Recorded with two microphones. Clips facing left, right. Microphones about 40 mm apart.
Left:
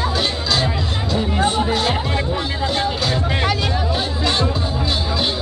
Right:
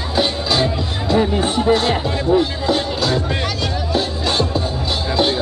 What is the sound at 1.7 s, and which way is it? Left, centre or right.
Music, centre.